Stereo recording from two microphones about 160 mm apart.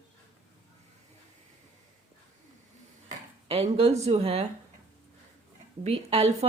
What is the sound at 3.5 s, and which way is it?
Speech, 40° right (ahead or behind).